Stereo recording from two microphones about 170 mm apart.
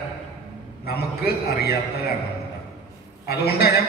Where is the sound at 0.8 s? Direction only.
65° left (ahead or behind).